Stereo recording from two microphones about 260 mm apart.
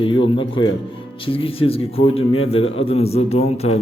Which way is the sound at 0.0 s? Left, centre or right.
Centre.